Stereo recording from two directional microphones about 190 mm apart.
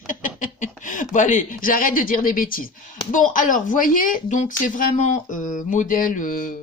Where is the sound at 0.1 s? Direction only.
45° left (ahead or behind).